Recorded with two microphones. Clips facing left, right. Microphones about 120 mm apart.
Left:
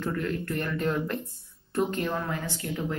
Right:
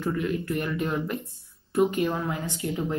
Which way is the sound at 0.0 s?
10° right (ahead or behind).